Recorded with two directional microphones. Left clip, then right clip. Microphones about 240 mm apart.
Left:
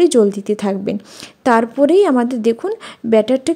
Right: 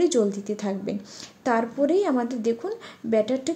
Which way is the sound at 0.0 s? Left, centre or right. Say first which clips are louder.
Left 10 dB; left.